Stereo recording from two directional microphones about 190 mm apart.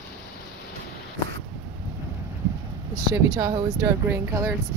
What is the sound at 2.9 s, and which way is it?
Speech, 20° right (ahead or behind).